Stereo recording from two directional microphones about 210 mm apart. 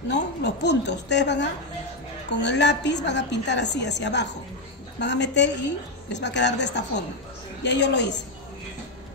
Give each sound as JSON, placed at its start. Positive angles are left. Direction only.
{"t": 0.1, "sound": "a woman's voice", "side_deg": 55}